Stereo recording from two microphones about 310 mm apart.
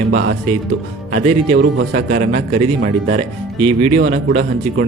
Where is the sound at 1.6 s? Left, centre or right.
Right.